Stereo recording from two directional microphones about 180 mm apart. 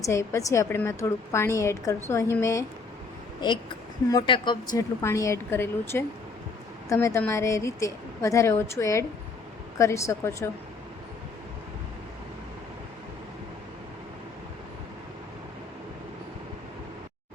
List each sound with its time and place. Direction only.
0.0 s speech: 15° left (ahead or behind)